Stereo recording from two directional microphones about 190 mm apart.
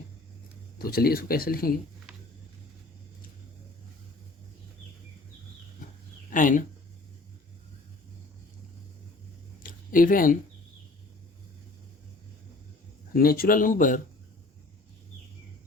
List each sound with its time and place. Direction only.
0.8 s speech: 50° left (ahead or behind)
6.3 s speech: 45° left (ahead or behind)
9.6 s a sound: 45° left (ahead or behind)
13.1 s speech: 50° left (ahead or behind)